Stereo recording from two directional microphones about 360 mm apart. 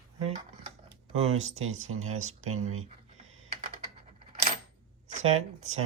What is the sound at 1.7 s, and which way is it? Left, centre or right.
Speech, right.